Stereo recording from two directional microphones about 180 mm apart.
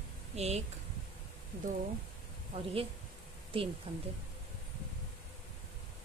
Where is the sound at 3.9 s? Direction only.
35° right (ahead or behind).